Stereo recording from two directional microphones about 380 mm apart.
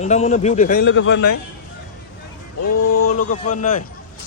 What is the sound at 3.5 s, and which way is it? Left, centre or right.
Speech, centre.